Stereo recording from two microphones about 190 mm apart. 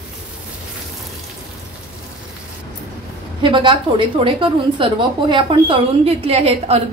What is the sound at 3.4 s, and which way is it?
A woman's voice, 25° right (ahead or behind).